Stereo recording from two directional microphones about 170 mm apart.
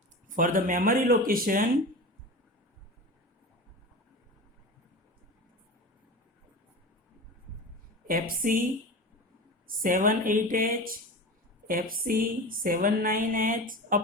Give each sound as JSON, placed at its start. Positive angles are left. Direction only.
{"t": 0.3, "sound": "speech", "side_deg": -50}
{"t": 8.0, "sound": "speech", "side_deg": -55}
{"t": 9.6, "sound": "speech", "side_deg": -55}